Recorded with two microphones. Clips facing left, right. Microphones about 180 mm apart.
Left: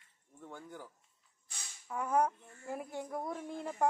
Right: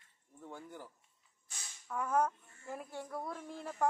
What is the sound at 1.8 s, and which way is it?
Speech, 10° left (ahead or behind).